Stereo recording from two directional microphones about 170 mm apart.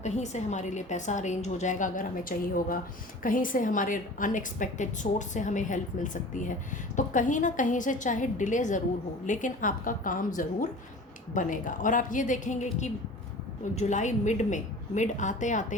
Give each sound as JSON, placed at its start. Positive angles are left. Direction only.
{"t": 0.0, "sound": "a woman's voice", "side_deg": 45}